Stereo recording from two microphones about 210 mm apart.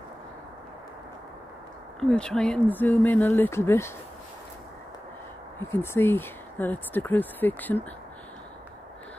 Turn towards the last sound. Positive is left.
turn(degrees=10)  # may be behind; listen again after turning